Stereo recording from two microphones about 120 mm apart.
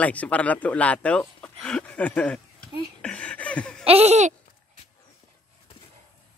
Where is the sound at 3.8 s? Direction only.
60° right (ahead or behind).